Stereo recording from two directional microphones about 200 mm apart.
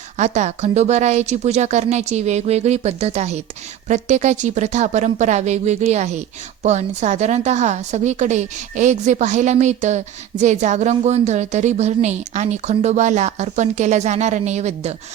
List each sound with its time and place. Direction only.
0.2 s speech: 35° right (ahead or behind)